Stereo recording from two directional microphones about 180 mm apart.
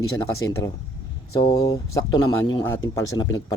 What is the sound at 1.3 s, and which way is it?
A man's voice, 20° left (ahead or behind).